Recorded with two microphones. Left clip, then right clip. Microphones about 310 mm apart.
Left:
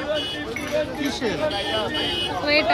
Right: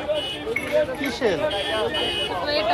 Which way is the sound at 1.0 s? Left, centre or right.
Centre.